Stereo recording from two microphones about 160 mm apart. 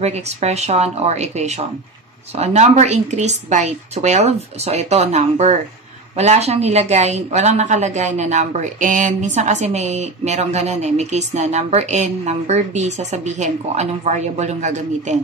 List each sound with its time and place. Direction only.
0.0 s speech: 45° right (ahead or behind)